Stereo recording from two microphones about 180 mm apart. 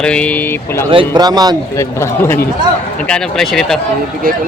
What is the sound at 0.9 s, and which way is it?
Speech, 25° right (ahead or behind).